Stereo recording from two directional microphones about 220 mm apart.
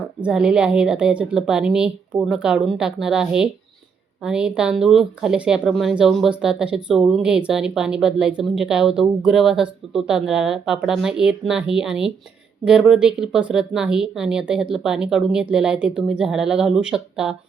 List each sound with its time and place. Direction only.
0.2 s speech: 5° right (ahead or behind)